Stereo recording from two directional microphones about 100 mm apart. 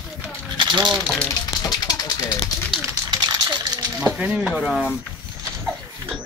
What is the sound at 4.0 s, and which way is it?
Speech, 10° right (ahead or behind).